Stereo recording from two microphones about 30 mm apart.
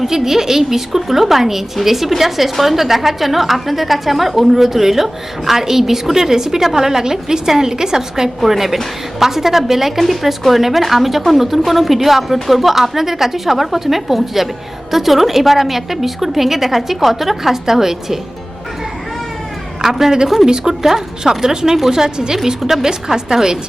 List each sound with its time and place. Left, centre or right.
0.0 s a woman's voice: centre
10.0 s a woman's voice: centre
19.8 s a woman's voice: centre
22.0 s a woman's voice: right